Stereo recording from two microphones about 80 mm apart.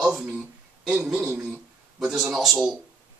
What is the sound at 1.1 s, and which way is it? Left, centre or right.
Speech, right.